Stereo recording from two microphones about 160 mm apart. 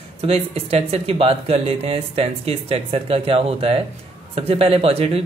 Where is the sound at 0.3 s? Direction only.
40° right (ahead or behind).